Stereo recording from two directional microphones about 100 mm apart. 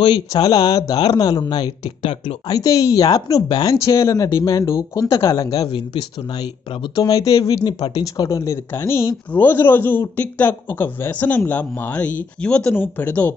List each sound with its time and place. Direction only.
0.0 s speech: 45° left (ahead or behind)
2.4 s speech: 35° left (ahead or behind)
3.7 s speech: 30° left (ahead or behind)
5.7 s speech: 55° left (ahead or behind)
7.6 s speech: 50° left (ahead or behind)
8.0 s speech: 35° left (ahead or behind); by 13.3 s 15° left (ahead or behind)